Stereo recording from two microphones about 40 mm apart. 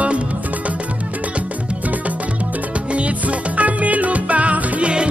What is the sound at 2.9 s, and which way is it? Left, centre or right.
Music, right.